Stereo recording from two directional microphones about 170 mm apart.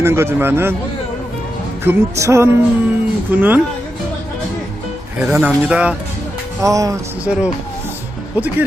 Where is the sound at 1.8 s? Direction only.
15° right (ahead or behind).